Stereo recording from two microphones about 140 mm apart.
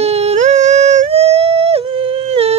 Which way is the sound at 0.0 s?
50° right (ahead or behind).